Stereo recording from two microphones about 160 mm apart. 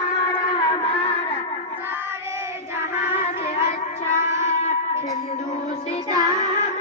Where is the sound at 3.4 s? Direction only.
45° left (ahead or behind).